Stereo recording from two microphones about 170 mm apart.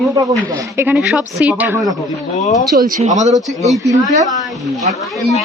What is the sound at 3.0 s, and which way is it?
Speech, 40° right (ahead or behind).